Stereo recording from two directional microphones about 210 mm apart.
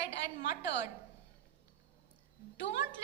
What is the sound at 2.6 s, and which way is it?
Speech, 55° left (ahead or behind).